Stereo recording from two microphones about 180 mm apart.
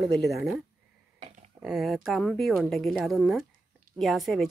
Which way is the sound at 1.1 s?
35° right (ahead or behind).